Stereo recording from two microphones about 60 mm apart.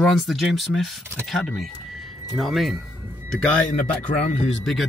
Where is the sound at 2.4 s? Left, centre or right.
Centre.